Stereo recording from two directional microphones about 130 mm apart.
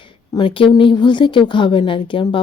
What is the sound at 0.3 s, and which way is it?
A woman's voice, 40° left (ahead or behind).